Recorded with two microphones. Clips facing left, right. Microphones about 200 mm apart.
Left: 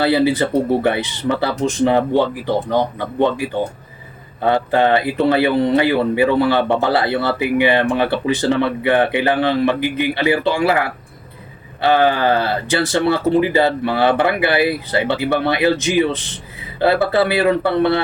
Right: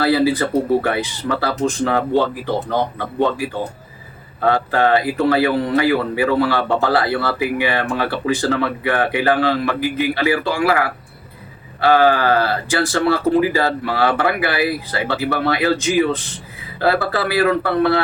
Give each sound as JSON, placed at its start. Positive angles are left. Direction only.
{"t": 0.0, "sound": "speech", "side_deg": 25}
{"t": 4.4, "sound": "speech", "side_deg": 20}
{"t": 11.8, "sound": "speech", "side_deg": 20}